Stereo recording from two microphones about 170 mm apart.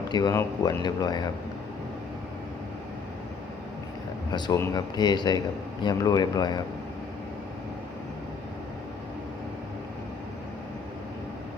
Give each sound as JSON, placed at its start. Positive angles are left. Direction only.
{"t": 0.1, "sound": "speech", "side_deg": 20}
{"t": 4.3, "sound": "speech", "side_deg": 25}